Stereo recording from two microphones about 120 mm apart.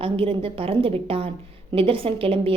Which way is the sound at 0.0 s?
50° right (ahead or behind).